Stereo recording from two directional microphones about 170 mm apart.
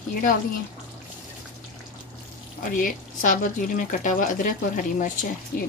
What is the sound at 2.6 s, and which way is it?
Speech, 50° left (ahead or behind).